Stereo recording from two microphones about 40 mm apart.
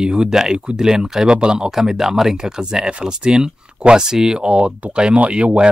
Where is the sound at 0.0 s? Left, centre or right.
Right.